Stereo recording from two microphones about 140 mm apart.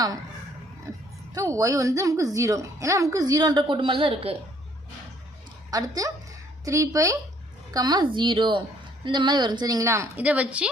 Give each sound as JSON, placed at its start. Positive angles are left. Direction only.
{"t": 0.9, "sound": "a woman's voice", "side_deg": -25}
{"t": 5.7, "sound": "a woman's voice", "side_deg": -25}
{"t": 10.2, "sound": "a woman's voice", "side_deg": -10}